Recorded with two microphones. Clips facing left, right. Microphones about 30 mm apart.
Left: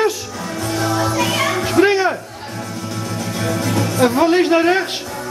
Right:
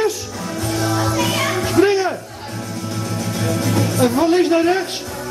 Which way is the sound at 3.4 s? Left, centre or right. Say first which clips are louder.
Even; centre.